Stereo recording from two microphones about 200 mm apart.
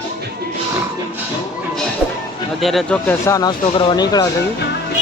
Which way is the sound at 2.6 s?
5° left (ahead or behind).